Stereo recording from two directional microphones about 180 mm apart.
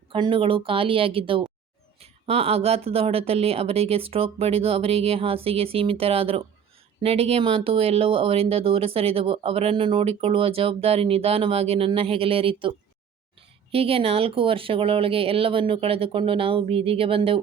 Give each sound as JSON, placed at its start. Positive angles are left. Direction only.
{"t": 0.1, "sound": "speech", "side_deg": -30}